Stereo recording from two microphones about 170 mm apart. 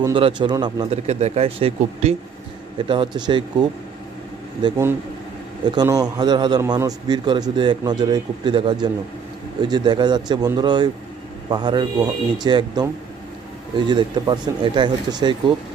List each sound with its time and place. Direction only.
0.0 s a man's voice: 30° right (ahead or behind)
0.9 s a man's voice: 40° right (ahead or behind)